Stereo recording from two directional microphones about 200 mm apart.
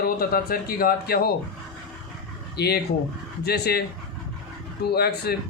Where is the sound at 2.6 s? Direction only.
50° left (ahead or behind).